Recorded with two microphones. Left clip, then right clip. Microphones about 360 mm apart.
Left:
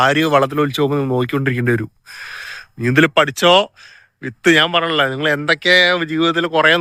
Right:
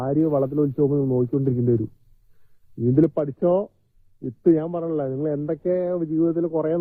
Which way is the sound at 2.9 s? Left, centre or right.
Left.